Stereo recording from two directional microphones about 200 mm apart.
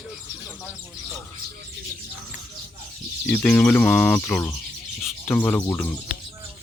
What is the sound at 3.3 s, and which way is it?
Speech, 5° left (ahead or behind).